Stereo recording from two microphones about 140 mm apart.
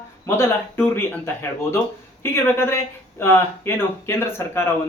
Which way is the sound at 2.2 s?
15° left (ahead or behind).